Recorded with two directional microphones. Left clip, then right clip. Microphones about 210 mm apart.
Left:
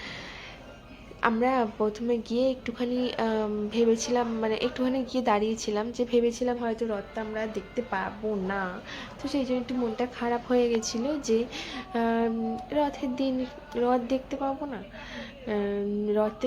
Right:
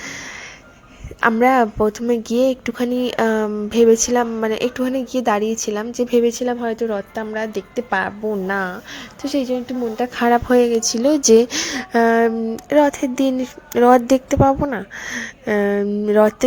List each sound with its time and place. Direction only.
0.0 s music: 35° right (ahead or behind)
1.2 s speech: 40° right (ahead or behind)